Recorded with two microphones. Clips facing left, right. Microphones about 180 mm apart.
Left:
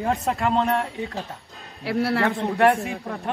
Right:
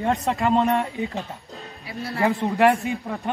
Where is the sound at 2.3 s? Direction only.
Centre (ahead or behind).